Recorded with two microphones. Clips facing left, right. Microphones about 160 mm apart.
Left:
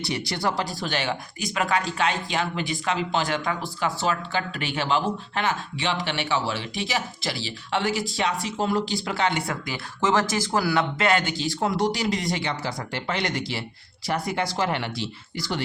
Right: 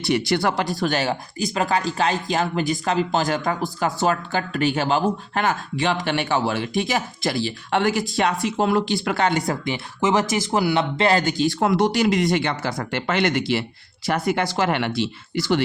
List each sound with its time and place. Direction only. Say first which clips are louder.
0.3 s speech: right 5 dB; 65° right (ahead or behind)
0.9 s speech: right 4 dB; 40° right (ahead or behind); by 9.0 s 65° right (ahead or behind)
9.0 s speech: right 4 dB; 50° right (ahead or behind)
9.5 s speech: right 6 dB; 25° right (ahead or behind); by 15.6 s 75° right (ahead or behind)